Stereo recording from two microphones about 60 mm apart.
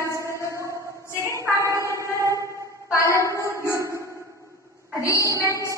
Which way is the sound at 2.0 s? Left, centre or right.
Right.